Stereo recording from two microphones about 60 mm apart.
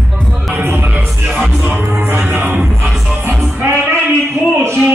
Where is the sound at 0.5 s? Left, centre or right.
Right.